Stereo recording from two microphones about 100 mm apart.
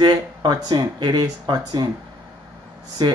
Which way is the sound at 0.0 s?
50° right (ahead or behind).